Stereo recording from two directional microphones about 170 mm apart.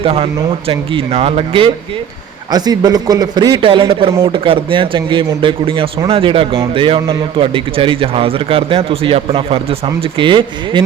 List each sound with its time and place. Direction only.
0.0 s speech: 35° right (ahead or behind)
2.5 s a man's voice: 25° right (ahead or behind)